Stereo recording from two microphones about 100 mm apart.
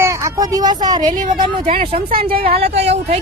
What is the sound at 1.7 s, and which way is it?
Speech, 70° right (ahead or behind).